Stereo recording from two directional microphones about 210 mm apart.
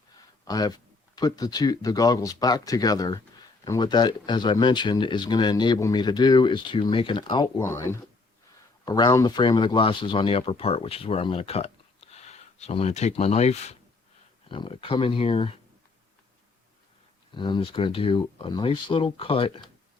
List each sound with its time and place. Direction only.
0.4 s speech: 20° left (ahead or behind)
17.3 s speech: 20° left (ahead or behind)